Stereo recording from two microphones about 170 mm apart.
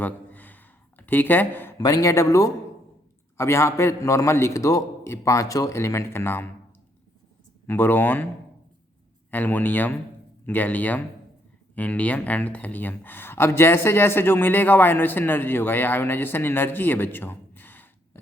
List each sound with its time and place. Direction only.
0.0 s a sound: 10° left (ahead or behind)
1.8 s speech: 20° left (ahead or behind)
7.7 s speech: 10° left (ahead or behind)
9.3 s speech: 10° left (ahead or behind)